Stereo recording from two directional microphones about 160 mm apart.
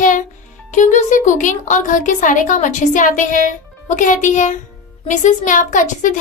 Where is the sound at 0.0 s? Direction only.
55° left (ahead or behind).